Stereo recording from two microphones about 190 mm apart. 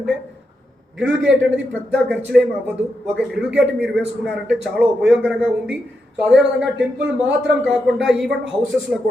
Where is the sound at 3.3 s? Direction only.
65° right (ahead or behind).